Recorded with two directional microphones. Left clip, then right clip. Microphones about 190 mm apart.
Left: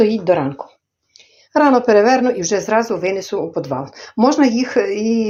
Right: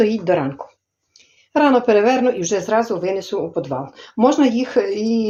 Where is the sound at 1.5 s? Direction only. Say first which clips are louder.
Left 2 dB; 15° left (ahead or behind).